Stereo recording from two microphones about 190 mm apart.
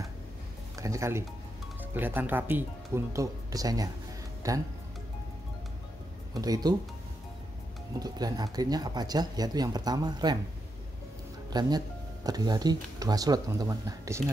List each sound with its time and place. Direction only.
0.7 s speech: 15° right (ahead or behind)
6.3 s speech: 20° right (ahead or behind)
8.0 s speech: 20° right (ahead or behind)
11.5 s speech: 20° right (ahead or behind)